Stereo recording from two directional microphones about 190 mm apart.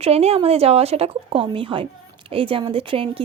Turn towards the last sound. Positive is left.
turn(degrees=-30)  # may be behind; listen again after turning